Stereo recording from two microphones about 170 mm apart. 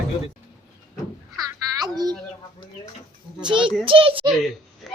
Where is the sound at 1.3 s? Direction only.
25° right (ahead or behind).